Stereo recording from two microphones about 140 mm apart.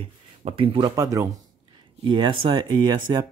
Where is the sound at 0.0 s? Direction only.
40° right (ahead or behind); by 1.3 s 25° right (ahead or behind).